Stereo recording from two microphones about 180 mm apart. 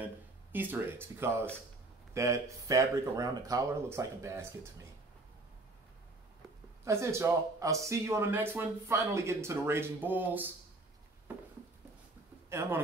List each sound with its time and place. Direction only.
0.0 s speech: 10° right (ahead or behind)
6.8 s speech: 15° right (ahead or behind)
12.4 s speech: 15° right (ahead or behind)